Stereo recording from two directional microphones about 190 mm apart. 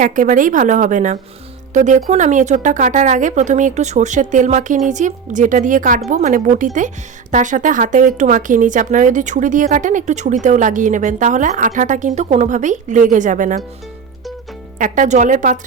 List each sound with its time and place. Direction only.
0.0 s speech: 45° right (ahead or behind)
14.8 s speech: 45° right (ahead or behind)